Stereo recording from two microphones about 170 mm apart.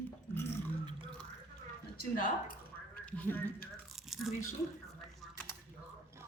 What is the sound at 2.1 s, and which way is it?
Speech, 55° left (ahead or behind).